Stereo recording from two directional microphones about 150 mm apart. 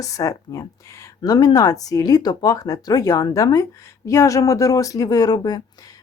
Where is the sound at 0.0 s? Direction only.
20° left (ahead or behind).